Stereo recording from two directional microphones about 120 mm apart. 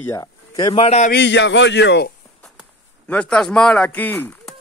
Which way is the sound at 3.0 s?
10° left (ahead or behind).